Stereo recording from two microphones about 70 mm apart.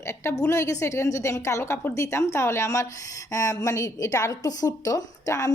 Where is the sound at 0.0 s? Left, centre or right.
Left.